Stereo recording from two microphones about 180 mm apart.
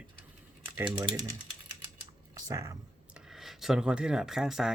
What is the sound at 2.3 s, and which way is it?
Speech, 20° right (ahead or behind).